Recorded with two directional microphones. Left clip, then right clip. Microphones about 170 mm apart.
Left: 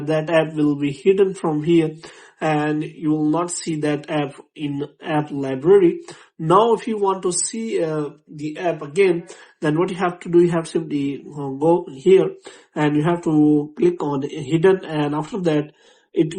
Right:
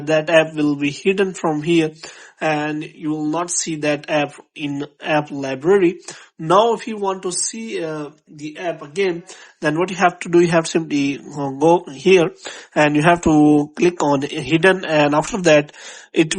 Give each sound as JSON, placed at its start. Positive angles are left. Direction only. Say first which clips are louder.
{"t": 0.1, "sound": "speech", "louder": "right 4 dB", "side_deg": -25}